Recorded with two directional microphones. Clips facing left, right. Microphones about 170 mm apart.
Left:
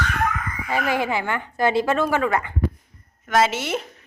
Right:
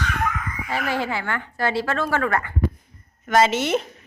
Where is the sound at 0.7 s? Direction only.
15° left (ahead or behind).